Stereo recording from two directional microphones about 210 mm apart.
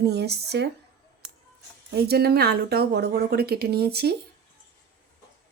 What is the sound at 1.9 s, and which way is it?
A woman's voice, 50° right (ahead or behind).